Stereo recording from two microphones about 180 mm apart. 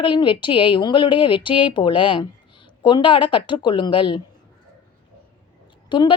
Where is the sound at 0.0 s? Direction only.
25° left (ahead or behind).